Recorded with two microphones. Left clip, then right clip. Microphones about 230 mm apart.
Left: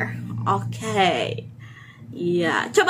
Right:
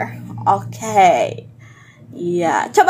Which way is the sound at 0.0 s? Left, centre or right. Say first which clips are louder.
Right 8 dB; centre.